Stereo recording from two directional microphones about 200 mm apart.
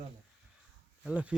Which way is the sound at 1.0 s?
5° right (ahead or behind).